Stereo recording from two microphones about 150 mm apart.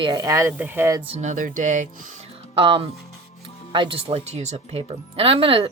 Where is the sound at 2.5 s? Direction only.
35° right (ahead or behind).